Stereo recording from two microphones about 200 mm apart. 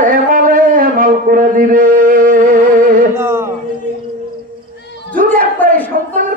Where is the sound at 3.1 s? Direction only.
10° right (ahead or behind).